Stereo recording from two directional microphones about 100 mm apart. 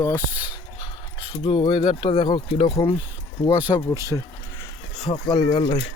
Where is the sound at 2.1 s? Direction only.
50° left (ahead or behind).